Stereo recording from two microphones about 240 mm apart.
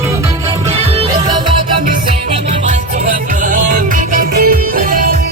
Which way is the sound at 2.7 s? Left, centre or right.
Right.